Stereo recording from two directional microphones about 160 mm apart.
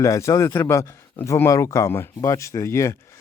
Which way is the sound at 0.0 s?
20° left (ahead or behind).